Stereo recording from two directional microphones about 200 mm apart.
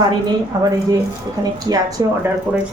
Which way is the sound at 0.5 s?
20° right (ahead or behind).